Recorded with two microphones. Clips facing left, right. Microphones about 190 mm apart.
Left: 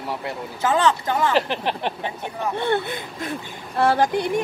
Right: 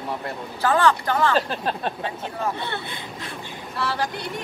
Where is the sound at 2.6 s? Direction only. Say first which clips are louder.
Left 9 dB; 50° left (ahead or behind).